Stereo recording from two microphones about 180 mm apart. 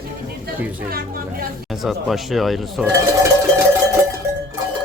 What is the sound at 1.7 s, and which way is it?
Speech, centre (ahead or behind).